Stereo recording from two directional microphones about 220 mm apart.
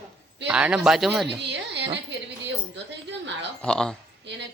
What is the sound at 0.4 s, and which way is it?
Speech, 5° right (ahead or behind).